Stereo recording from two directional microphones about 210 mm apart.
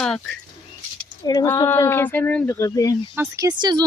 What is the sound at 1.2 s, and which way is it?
Speech, 20° left (ahead or behind).